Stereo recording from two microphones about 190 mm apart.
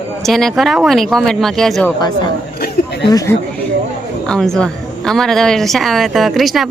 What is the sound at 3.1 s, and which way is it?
Speech, 20° left (ahead or behind).